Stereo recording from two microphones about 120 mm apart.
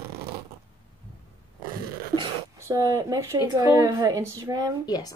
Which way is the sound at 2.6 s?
25° right (ahead or behind).